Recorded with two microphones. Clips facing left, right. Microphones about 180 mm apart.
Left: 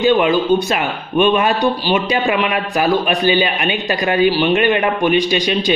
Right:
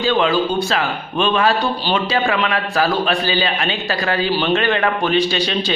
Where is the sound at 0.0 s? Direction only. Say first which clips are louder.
Left 3 dB; 15° left (ahead or behind).